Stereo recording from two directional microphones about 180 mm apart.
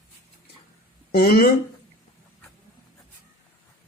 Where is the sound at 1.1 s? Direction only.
55° left (ahead or behind).